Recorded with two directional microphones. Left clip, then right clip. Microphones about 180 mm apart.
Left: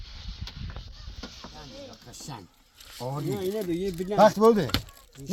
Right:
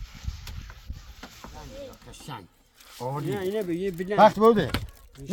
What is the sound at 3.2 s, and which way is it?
Speech, 5° left (ahead or behind).